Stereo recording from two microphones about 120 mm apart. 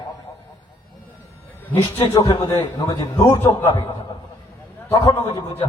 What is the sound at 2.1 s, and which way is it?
A man's voice, 35° left (ahead or behind).